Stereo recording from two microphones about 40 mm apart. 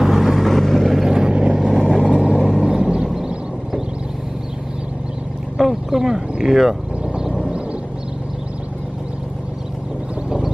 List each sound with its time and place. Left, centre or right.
0.0 s vehicle: centre
0.8 s vehicle: centre
1.3 s vehicle: right
2.4 s vehicle: centre
5.6 s a sound: centre
6.4 s speech: centre
7.2 s vehicle: centre